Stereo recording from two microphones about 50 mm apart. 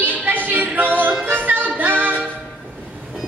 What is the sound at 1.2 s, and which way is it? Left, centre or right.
Music, right.